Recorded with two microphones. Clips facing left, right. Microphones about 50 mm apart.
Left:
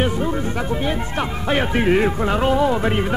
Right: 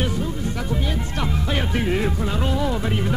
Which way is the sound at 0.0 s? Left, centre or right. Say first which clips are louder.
Left 5 dB; left.